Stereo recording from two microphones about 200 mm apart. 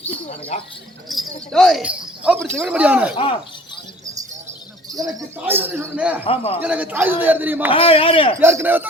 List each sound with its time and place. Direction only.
0.3 s speech: 30° left (ahead or behind)
1.0 s speech: centre (ahead or behind)
4.9 s speech: 15° right (ahead or behind)
6.2 s a man's voice: 30° left (ahead or behind)
6.6 s speech: 5° right (ahead or behind)
7.7 s a man's voice: 30° left (ahead or behind)
8.4 s speech: 10° right (ahead or behind)